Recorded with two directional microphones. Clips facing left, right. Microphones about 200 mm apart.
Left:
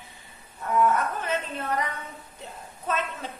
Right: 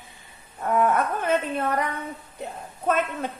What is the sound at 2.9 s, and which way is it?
Speech, 55° right (ahead or behind).